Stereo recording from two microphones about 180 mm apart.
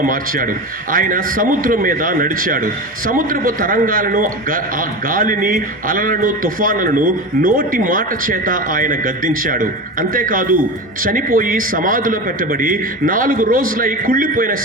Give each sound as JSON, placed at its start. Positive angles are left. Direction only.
{"t": 0.0, "sound": "a man's voice", "side_deg": -50}